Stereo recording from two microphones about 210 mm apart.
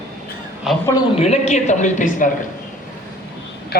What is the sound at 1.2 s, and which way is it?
A man's voice, 30° left (ahead or behind).